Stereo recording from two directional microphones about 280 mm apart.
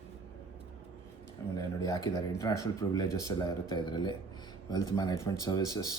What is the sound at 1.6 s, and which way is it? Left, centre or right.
Speech, centre.